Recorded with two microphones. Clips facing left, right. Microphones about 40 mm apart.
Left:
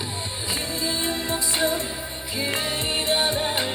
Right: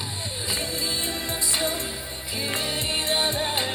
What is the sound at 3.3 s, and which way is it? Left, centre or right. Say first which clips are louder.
Music: left 1 dB; centre.